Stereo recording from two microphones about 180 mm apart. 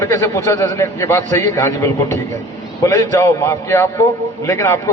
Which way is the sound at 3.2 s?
15° left (ahead or behind).